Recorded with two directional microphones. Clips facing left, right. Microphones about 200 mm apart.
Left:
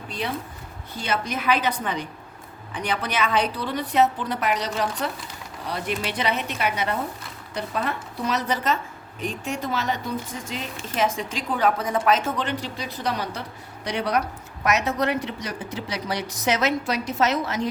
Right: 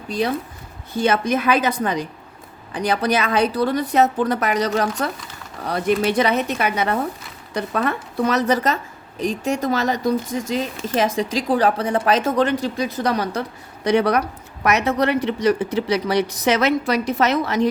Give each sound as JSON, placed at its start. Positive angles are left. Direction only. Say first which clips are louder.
{"t": 0.9, "sound": "a woman's voice", "louder": "right 9 dB", "side_deg": -50}
{"t": 11.8, "sound": "speech", "louder": "right 4 dB", "side_deg": -70}
{"t": 12.0, "sound": "a woman's voice", "louder": "right 6 dB", "side_deg": -35}
{"t": 14.6, "sound": "speech", "louder": "right 4 dB", "side_deg": -60}